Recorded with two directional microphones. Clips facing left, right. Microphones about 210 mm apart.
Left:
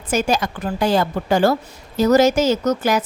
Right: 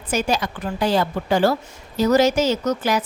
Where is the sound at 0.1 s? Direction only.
45° left (ahead or behind).